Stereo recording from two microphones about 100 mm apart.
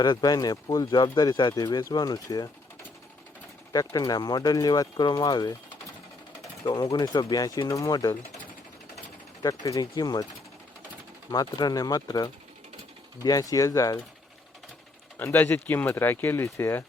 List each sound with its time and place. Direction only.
0.0 s speech: 45° left (ahead or behind)
3.7 s speech: 40° left (ahead or behind)
6.7 s speech: 45° left (ahead or behind)
9.4 s speech: 35° left (ahead or behind)
11.3 s speech: 40° left (ahead or behind)
15.2 s speech: 20° left (ahead or behind)